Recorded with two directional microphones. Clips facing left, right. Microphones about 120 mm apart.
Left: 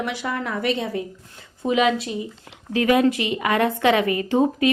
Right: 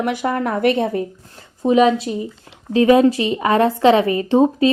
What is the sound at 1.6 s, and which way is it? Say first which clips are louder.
A woman's voice: right 6 dB; 35° right (ahead or behind).